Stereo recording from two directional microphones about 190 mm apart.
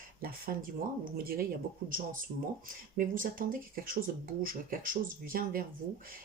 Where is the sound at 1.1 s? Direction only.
50° right (ahead or behind).